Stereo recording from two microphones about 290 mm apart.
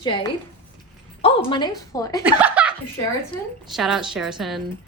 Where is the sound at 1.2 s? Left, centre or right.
Centre.